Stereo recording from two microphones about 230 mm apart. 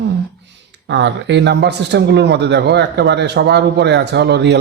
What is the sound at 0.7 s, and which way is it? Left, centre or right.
Speech, right.